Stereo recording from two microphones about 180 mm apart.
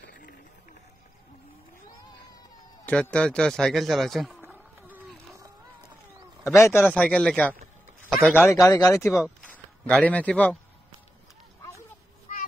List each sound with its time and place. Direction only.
2.8 s speech: 5° left (ahead or behind)
4.4 s a sound: 10° right (ahead or behind)
6.6 s speech: 10° left (ahead or behind)
12.3 s child singing: 45° left (ahead or behind)